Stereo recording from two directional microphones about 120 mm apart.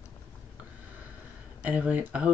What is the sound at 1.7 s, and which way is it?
Speech, 15° right (ahead or behind).